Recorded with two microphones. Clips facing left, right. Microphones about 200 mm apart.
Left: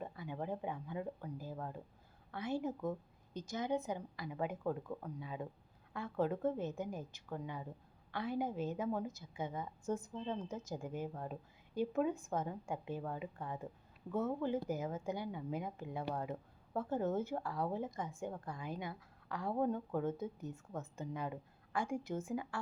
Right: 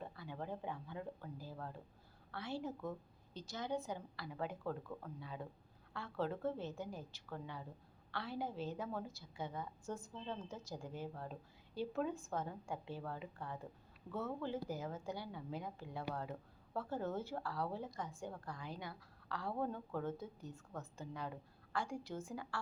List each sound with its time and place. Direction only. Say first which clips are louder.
0.0 s a woman's voice: left 4 dB; 15° left (ahead or behind)